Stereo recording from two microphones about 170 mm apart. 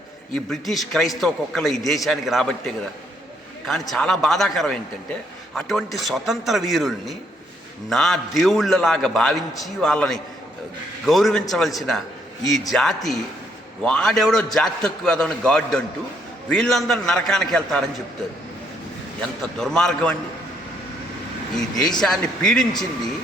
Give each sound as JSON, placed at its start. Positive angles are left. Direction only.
{"t": 0.3, "sound": "a man's voice", "side_deg": 0}
{"t": 3.7, "sound": "a man's voice", "side_deg": 0}
{"t": 19.2, "sound": "a man's voice", "side_deg": 5}
{"t": 21.8, "sound": "a man's voice", "side_deg": 25}
{"t": 22.0, "sound": "a man's voice", "side_deg": 5}